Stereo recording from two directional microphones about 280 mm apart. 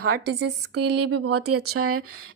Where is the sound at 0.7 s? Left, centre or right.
Right.